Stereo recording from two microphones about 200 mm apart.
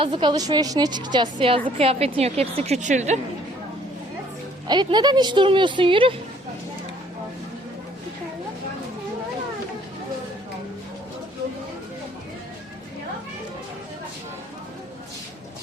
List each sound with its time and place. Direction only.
0.0 s a woman's voice: 25° right (ahead or behind)
4.7 s a woman's voice: 20° right (ahead or behind)